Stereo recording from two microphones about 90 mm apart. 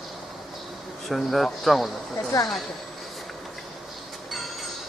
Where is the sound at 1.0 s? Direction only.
Centre (ahead or behind).